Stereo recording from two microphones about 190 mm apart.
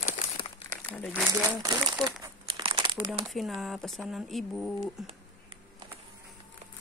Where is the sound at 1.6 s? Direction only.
20° right (ahead or behind).